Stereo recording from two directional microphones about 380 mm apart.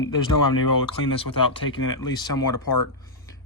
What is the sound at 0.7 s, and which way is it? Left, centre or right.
Speech, left.